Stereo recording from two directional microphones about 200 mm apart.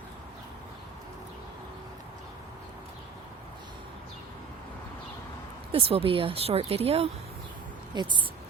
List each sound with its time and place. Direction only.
5.7 s speech: 30° right (ahead or behind)